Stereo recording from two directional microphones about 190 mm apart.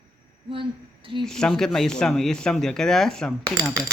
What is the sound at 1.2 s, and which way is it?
Speech, 5° left (ahead or behind).